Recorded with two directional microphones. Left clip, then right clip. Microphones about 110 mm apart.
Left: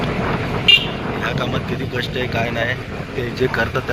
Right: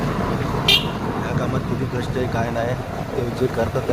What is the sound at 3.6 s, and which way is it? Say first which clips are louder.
Speech: left 2 dB; 5° left (ahead or behind).